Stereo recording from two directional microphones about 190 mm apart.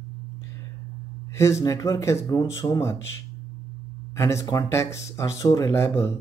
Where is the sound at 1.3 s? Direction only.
15° left (ahead or behind).